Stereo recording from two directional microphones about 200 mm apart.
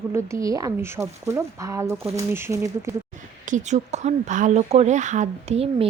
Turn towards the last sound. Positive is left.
turn(degrees=-30)  # may be behind; listen again after turning